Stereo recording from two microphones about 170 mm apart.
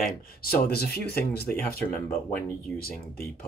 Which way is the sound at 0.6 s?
65° left (ahead or behind).